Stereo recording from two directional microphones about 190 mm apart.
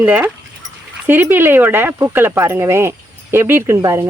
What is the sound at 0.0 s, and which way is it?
Speech, 10° right (ahead or behind).